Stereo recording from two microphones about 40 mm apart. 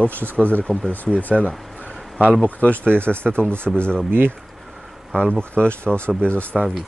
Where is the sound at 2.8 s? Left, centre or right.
Right.